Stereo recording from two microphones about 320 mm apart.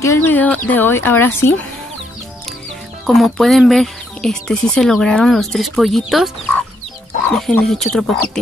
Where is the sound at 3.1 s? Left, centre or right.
Centre.